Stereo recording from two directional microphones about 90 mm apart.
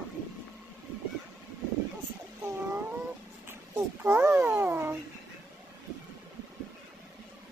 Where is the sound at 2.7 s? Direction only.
20° right (ahead or behind).